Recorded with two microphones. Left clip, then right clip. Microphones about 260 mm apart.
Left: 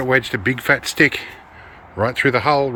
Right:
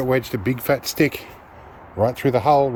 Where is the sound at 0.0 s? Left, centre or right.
Centre.